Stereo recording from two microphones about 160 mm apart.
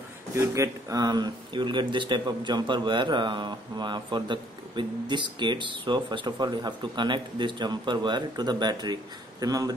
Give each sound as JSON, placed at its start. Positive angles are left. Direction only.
{"t": 0.3, "sound": "speech", "side_deg": -20}